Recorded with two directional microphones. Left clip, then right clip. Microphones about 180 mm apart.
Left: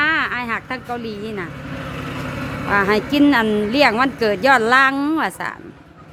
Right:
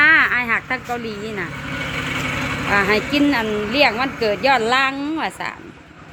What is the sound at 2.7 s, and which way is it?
Speech, 15° left (ahead or behind).